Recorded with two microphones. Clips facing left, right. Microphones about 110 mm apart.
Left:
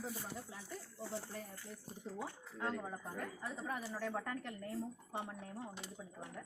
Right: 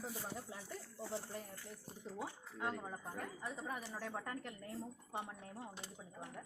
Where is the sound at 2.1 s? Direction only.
10° right (ahead or behind).